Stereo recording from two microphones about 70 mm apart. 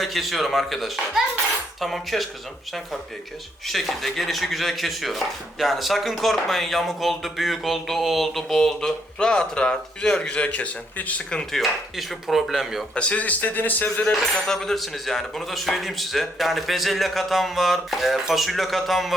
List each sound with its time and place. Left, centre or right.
0.0 s speech: centre
3.7 s speech: centre; by 11.2 s left
11.3 s dishes: centre
11.6 s speech: centre
12.9 s speech: centre
14.0 s speech: centre